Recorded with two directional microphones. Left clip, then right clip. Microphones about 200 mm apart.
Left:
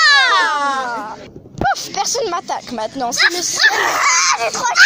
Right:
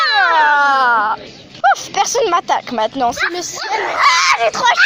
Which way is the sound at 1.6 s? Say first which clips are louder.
Right 5 dB; 5° right (ahead or behind).